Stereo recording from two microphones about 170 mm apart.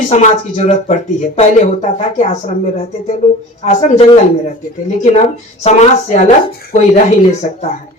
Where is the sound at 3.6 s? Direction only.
40° left (ahead or behind).